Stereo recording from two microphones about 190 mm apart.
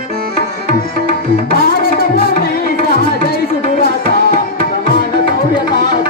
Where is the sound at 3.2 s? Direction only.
50° left (ahead or behind).